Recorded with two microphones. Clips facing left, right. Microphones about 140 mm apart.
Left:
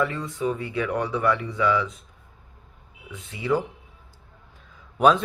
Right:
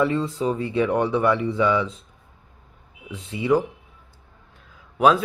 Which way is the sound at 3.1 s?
30° right (ahead or behind).